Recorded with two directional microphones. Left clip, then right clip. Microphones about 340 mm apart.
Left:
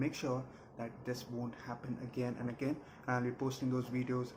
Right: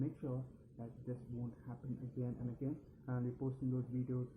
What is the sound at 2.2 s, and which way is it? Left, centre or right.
Speech, centre.